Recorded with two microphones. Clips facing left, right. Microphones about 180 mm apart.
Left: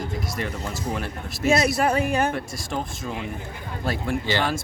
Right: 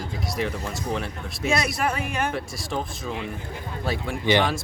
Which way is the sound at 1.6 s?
30° left (ahead or behind).